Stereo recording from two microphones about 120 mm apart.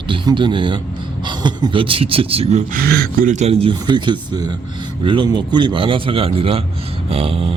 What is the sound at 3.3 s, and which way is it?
Speech, 70° right (ahead or behind).